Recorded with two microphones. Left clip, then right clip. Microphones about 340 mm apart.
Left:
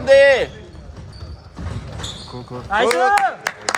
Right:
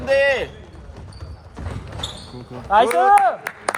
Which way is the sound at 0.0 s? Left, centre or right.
Left.